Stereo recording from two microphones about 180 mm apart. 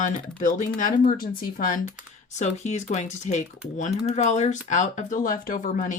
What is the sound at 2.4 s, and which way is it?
Speech, 40° left (ahead or behind).